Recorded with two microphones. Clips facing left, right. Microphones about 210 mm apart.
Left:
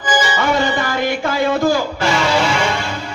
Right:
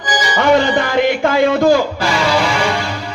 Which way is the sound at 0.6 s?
55° right (ahead or behind).